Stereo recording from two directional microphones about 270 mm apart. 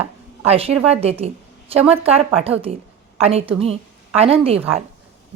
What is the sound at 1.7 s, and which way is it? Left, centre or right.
A woman's voice, right.